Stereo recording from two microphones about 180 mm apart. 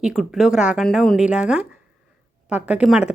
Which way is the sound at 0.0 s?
5° right (ahead or behind).